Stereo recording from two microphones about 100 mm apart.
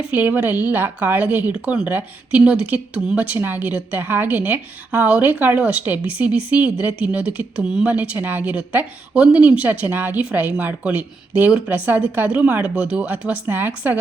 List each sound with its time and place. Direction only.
0.1 s speech: 20° right (ahead or behind)